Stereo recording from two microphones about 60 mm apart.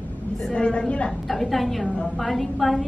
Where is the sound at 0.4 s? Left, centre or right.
Centre.